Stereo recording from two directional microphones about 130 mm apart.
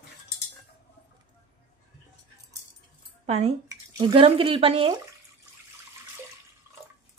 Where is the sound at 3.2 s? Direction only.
55° right (ahead or behind).